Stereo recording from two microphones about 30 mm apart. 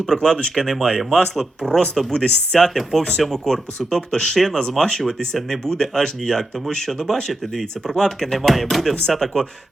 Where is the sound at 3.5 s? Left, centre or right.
Left.